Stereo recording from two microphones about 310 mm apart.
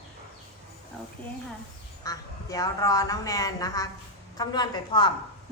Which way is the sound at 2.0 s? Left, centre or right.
Centre.